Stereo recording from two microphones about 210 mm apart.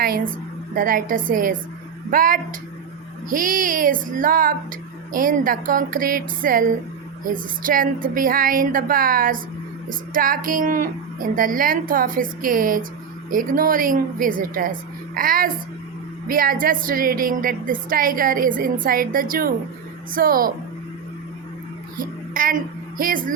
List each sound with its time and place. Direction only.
0.0 s a woman's voice: 45° right (ahead or behind)
21.9 s a sound: 40° right (ahead or behind)
23.0 s a woman's voice: 40° right (ahead or behind)